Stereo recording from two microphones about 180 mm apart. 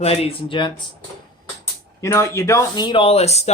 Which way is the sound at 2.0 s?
15° left (ahead or behind).